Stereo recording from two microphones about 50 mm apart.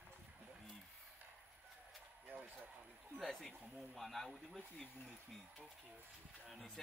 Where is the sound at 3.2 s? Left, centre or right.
Centre.